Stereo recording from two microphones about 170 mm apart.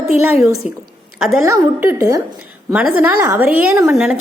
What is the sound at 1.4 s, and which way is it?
A woman's voice, 15° right (ahead or behind).